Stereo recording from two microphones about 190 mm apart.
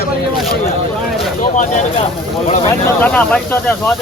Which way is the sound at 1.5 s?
40° left (ahead or behind).